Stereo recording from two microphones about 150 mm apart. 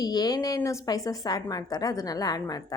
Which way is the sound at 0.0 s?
25° left (ahead or behind).